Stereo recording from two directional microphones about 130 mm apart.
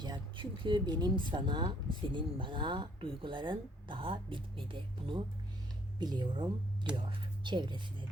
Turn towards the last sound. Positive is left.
turn(degrees=-35)  # may be behind; listen again after turning